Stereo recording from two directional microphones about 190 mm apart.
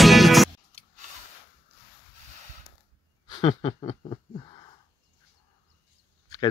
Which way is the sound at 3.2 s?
25° left (ahead or behind).